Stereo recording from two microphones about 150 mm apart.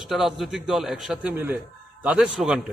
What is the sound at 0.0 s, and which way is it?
A man's voice, centre (ahead or behind).